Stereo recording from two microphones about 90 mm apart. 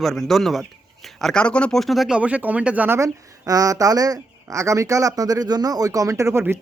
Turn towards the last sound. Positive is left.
turn(degrees=-35)  # may be behind; listen again after turning